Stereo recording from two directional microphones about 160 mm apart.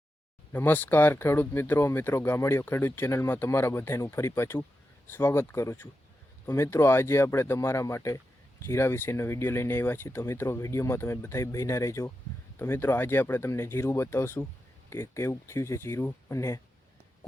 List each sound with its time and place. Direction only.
0.5 s speech: 10° left (ahead or behind)